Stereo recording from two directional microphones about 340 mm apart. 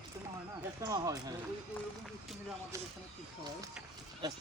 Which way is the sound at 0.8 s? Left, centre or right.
Centre.